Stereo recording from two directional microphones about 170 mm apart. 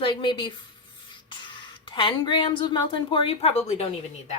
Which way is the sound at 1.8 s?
30° left (ahead or behind).